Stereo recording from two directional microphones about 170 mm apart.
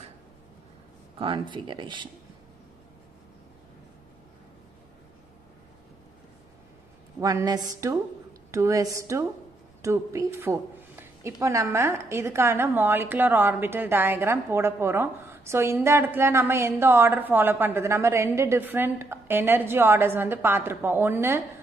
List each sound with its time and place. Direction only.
1.1 s speech: 30° right (ahead or behind)
7.2 s a woman's voice: 20° right (ahead or behind)